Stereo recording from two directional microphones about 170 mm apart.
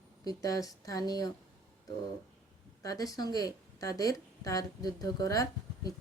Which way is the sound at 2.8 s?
20° left (ahead or behind).